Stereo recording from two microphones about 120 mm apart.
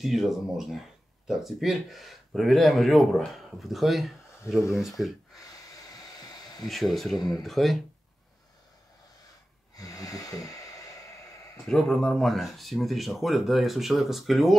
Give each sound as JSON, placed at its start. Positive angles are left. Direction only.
{"t": 0.0, "sound": "speech", "side_deg": 0}
{"t": 5.8, "sound": "a sound", "side_deg": 30}
{"t": 6.6, "sound": "speech", "side_deg": 0}
{"t": 9.8, "sound": "snort", "side_deg": 30}
{"t": 11.6, "sound": "speech", "side_deg": 5}